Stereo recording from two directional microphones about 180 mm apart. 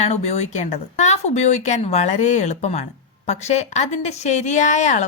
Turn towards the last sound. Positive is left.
turn(degrees=45)  # may be behind; listen again after turning